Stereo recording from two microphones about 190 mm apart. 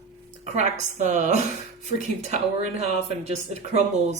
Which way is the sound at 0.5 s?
40° right (ahead or behind).